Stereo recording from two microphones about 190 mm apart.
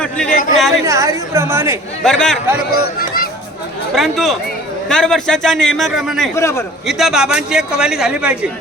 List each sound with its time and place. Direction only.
0.3 s speech: 45° left (ahead or behind)
0.5 s a man's voice: centre (ahead or behind)
0.9 s a woman's voice: 15° right (ahead or behind)
2.0 s a man's voice: centre (ahead or behind)
3.9 s a man's voice: centre (ahead or behind)
6.3 s a man's voice: 15° left (ahead or behind)
6.8 s a man's voice: centre (ahead or behind)